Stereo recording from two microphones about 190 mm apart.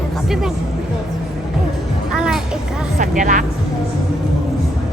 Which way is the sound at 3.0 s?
45° right (ahead or behind).